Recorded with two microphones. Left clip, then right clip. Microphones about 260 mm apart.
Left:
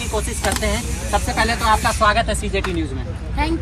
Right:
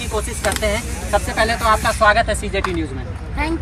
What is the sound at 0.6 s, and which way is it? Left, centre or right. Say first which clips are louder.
Speech: right 2 dB; centre.